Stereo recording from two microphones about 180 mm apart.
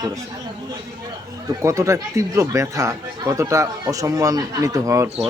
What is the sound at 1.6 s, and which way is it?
Speech, 15° right (ahead or behind).